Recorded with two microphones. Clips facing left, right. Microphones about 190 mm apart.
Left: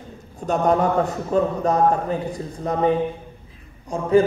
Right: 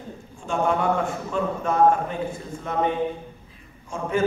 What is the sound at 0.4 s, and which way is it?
A man's voice, 40° left (ahead or behind).